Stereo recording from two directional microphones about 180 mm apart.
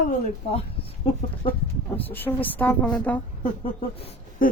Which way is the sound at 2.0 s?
10° left (ahead or behind).